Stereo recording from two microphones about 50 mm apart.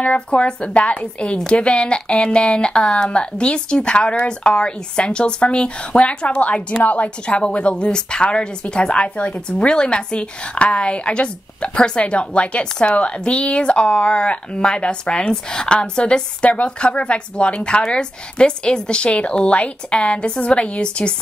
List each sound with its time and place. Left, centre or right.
0.0 s a woman's voice: left